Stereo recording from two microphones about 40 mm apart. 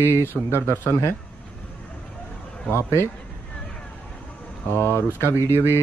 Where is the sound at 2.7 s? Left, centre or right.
Left.